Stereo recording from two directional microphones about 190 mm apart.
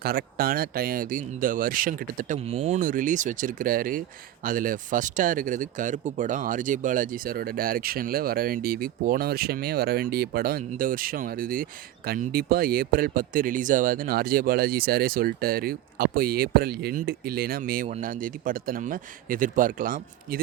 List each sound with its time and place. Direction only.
0.0 s speech: 50° right (ahead or behind)